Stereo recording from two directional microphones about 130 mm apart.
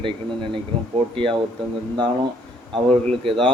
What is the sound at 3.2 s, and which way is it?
Speech, 45° right (ahead or behind).